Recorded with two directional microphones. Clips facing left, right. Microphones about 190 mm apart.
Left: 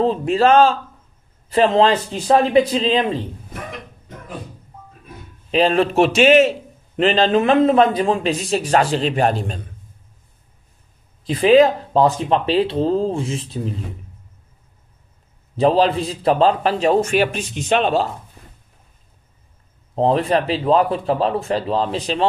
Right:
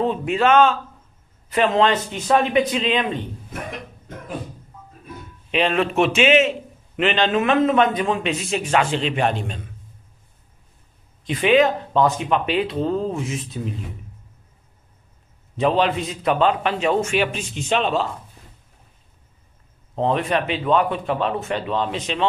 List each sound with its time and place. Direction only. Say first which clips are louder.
0.0 s a man's voice: left 4 dB; 35° left (ahead or behind)
5.5 s a man's voice: left 4 dB; 35° left (ahead or behind)
11.2 s a man's voice: left 4 dB; 35° left (ahead or behind)
15.5 s a man's voice: left 4 dB; 35° left (ahead or behind); by 18.0 s 50° left (ahead or behind)
20.0 s a man's voice: left 4 dB; 35° left (ahead or behind)